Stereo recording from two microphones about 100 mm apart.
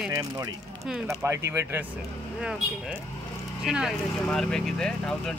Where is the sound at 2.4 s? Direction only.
10° right (ahead or behind).